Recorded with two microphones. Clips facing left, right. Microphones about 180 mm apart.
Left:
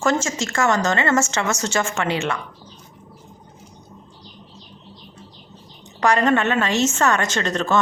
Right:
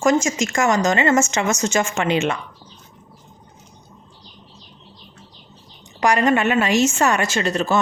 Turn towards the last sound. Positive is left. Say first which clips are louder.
# right 1 dB
turn(degrees=-10)  # may be behind; listen again after turning